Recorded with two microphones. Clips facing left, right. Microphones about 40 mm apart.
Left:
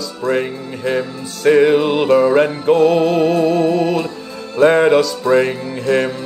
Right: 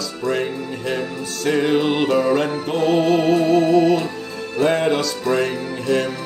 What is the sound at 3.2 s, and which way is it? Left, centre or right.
Music, right.